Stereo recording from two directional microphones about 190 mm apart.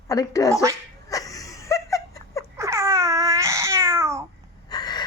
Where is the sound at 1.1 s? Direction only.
20° left (ahead or behind).